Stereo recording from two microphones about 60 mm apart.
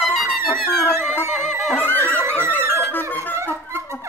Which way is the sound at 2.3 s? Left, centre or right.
Right.